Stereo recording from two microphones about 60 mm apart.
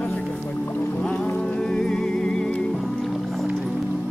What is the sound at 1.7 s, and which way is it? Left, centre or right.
Music, centre.